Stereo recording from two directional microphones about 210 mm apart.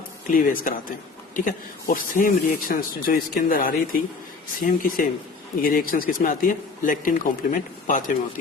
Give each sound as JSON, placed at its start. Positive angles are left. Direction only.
{"t": 0.3, "sound": "speech", "side_deg": 40}